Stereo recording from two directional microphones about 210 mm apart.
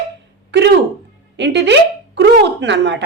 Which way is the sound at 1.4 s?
55° right (ahead or behind).